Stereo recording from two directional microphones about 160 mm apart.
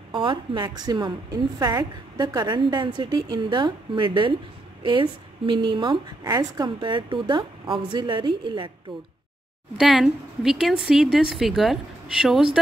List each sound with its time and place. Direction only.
0.1 s a woman's voice: 30° right (ahead or behind)
5.5 s a woman's voice: 30° right (ahead or behind)
9.8 s a woman's voice: 5° right (ahead or behind)